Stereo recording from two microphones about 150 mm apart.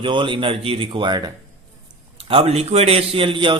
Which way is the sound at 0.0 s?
35° right (ahead or behind).